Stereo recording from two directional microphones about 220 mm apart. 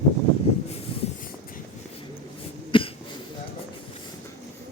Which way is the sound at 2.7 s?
25° left (ahead or behind).